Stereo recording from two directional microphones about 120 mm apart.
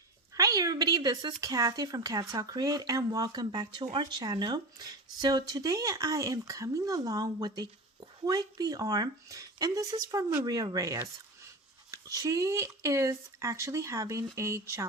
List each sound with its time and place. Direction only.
0.3 s a woman's voice: 30° right (ahead or behind)